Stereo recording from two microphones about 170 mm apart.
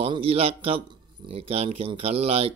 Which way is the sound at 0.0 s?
35° right (ahead or behind).